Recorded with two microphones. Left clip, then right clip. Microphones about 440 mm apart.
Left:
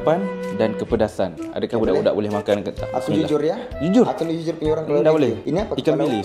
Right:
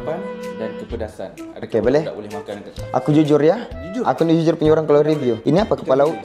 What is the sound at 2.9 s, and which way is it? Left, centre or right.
Speech, right.